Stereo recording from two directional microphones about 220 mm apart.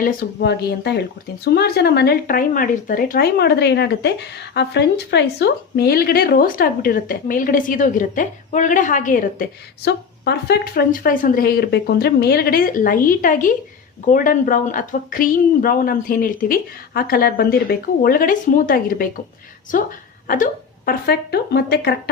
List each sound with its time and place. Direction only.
0.0 s a woman's voice: 45° left (ahead or behind)
20.2 s a woman's voice: 40° left (ahead or behind)